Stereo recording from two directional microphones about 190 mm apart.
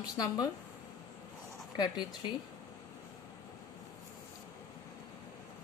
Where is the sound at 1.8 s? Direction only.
25° left (ahead or behind).